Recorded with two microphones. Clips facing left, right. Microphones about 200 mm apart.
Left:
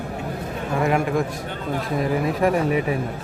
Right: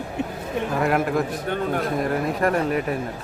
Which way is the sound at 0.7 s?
Centre (ahead or behind).